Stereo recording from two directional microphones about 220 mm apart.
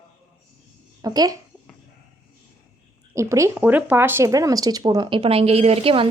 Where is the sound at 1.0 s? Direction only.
15° right (ahead or behind).